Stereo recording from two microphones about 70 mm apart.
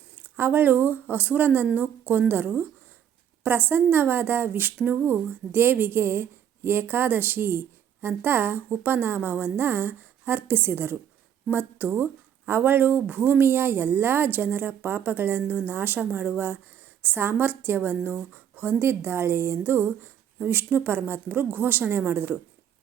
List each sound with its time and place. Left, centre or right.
0.2 s speech: right